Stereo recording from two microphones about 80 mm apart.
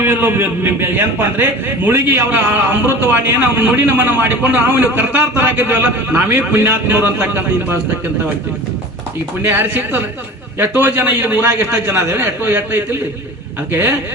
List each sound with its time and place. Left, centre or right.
0.0 s a man's voice: right
9.4 s a man's voice: right